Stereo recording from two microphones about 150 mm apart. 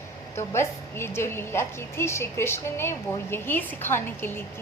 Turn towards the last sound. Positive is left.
turn(degrees=15)  # may be behind; listen again after turning